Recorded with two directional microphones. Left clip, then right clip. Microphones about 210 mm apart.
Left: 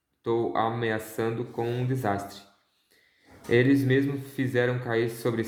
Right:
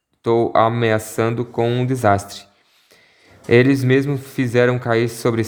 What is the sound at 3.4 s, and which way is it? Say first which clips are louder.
Speech: right 8 dB; 45° right (ahead or behind).